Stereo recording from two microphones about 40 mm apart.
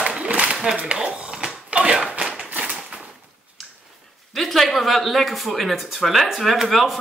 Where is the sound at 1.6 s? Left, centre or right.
Right.